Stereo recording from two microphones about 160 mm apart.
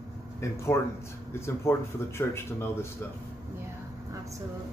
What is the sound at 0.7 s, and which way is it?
Speech, 15° left (ahead or behind).